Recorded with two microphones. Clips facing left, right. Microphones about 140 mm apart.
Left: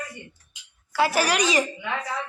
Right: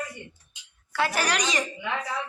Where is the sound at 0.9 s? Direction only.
5° left (ahead or behind).